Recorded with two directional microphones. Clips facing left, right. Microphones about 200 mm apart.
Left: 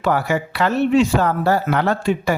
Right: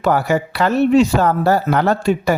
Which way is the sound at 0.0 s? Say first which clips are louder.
Right 3 dB; 40° right (ahead or behind).